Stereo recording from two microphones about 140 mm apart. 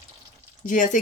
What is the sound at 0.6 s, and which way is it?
Speech, 65° left (ahead or behind).